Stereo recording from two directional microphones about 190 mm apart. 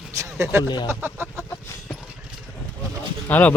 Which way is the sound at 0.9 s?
10° right (ahead or behind).